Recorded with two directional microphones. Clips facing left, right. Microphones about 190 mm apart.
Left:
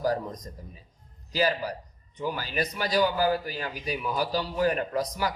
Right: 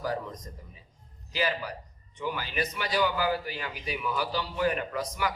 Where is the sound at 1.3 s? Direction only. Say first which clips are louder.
Left 4 dB; 40° left (ahead or behind).